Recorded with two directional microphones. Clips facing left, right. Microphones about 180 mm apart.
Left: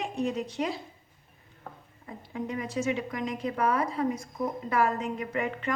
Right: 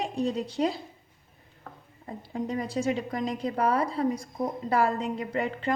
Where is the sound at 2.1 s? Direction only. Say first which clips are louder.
Right 3 dB; 35° right (ahead or behind).